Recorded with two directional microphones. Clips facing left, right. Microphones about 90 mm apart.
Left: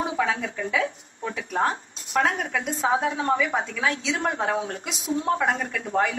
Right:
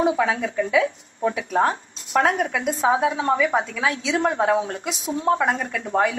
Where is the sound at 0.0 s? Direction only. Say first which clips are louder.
Right 5 dB; 35° right (ahead or behind).